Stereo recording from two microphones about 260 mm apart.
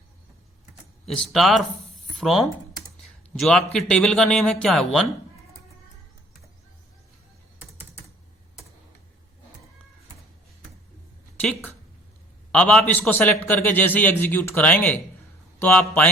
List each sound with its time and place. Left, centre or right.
1.0 s a man's voice: centre
11.3 s a sound: centre
12.5 s a man's voice: centre